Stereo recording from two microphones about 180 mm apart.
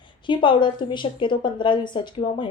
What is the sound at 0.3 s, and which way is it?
A woman's voice, 25° left (ahead or behind).